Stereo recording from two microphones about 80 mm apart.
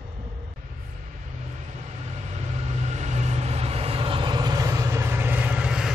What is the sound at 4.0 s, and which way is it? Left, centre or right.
Vehicle, right.